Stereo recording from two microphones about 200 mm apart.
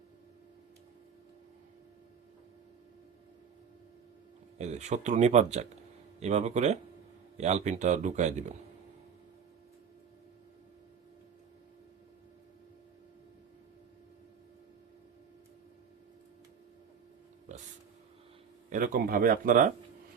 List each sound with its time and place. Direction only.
4.5 s a man's voice: 35° right (ahead or behind)
17.5 s a sound: 35° right (ahead or behind)
18.7 s speech: 45° right (ahead or behind)